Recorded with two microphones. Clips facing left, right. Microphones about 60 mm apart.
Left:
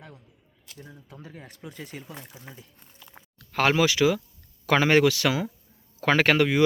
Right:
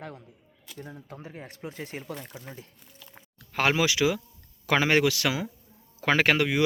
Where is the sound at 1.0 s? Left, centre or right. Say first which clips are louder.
Right 3 dB; right.